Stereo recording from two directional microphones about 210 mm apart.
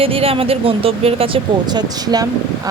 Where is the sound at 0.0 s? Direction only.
25° right (ahead or behind).